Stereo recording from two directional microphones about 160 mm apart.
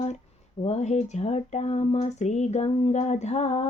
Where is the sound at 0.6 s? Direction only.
45° left (ahead or behind).